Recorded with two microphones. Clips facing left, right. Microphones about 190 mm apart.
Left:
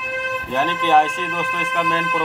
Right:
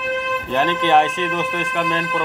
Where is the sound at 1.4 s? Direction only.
15° right (ahead or behind).